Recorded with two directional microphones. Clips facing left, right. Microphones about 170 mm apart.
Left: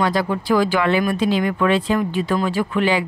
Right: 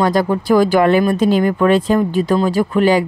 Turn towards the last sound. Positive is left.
turn(degrees=-40)  # may be behind; listen again after turning